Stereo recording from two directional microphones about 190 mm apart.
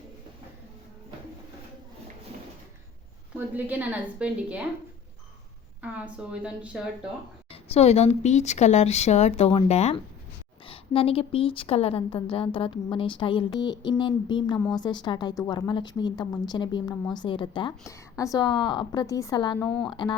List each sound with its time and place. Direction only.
3.3 s a woman's voice: 10° right (ahead or behind)
5.8 s a woman's voice: 5° right (ahead or behind)
7.5 s a woman's voice: 30° left (ahead or behind)
19.6 s speech: 5° left (ahead or behind)
19.9 s a woman's voice: 25° left (ahead or behind)